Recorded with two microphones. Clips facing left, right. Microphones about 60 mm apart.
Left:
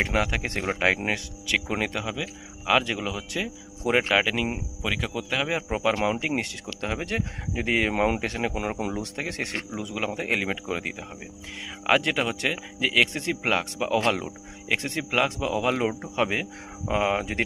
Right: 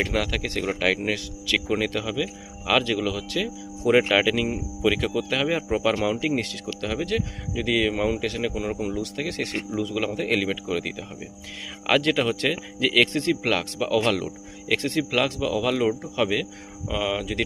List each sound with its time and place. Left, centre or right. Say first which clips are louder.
0.0 s speech: even; left
3.9 s speech: right 3 dB; centre
6.0 s speech: right 2 dB; left